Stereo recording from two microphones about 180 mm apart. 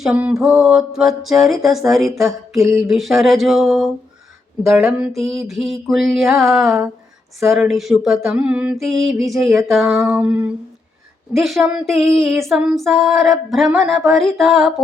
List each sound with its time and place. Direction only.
0.0 s female singing: 5° right (ahead or behind)
2.6 s a sound: 15° right (ahead or behind)
2.8 s female singing: centre (ahead or behind)